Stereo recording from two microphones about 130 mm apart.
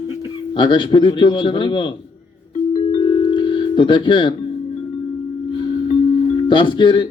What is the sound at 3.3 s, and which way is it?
Music, 35° left (ahead or behind).